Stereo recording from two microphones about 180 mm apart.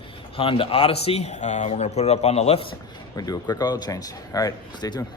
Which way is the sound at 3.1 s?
20° left (ahead or behind).